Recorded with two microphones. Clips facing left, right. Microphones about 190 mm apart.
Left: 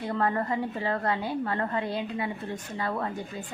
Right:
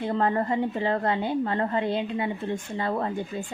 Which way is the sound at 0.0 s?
25° right (ahead or behind).